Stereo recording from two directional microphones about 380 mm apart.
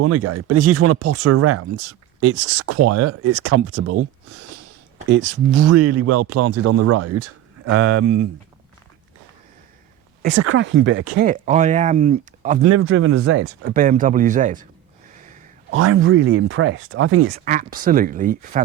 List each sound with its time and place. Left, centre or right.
0.0 s speech: right
5.5 s speech: right
10.3 s speech: right
12.6 s speech: right
15.7 s speech: right
17.3 s speech: centre